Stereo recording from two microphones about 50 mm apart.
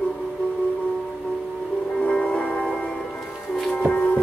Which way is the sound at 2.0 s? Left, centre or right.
Centre.